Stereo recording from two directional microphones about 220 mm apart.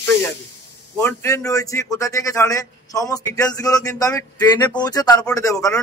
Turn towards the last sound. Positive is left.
turn(degrees=15)  # may be behind; listen again after turning